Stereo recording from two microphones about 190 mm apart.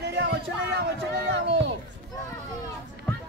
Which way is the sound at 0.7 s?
60° right (ahead or behind).